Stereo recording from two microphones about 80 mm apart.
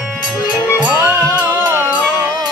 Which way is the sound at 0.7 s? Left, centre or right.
Centre.